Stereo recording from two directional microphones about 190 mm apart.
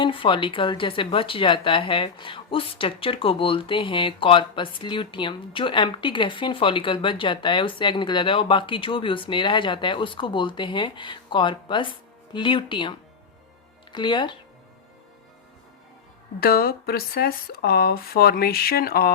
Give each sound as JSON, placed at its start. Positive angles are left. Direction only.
{"t": 0.0, "sound": "speech", "side_deg": 25}
{"t": 16.4, "sound": "speech", "side_deg": 50}